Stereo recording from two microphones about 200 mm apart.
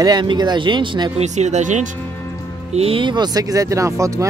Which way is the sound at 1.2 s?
35° right (ahead or behind).